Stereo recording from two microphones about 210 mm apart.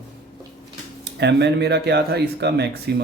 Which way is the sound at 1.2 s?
55° right (ahead or behind).